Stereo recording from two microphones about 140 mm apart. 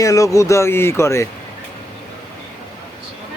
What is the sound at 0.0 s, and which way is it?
Speech, 25° left (ahead or behind).